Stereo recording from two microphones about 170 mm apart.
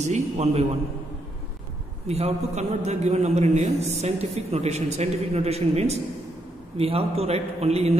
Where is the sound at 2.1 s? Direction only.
40° right (ahead or behind).